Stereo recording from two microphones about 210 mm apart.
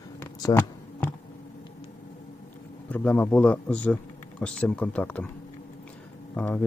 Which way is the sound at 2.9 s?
5° left (ahead or behind).